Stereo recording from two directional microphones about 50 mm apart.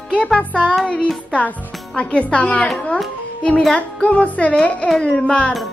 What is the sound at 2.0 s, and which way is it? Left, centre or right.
Speech, left.